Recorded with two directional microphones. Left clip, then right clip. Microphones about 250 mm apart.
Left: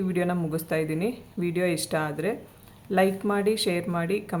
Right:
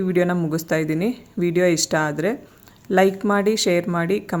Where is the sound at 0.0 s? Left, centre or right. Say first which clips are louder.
Right 7 dB; right.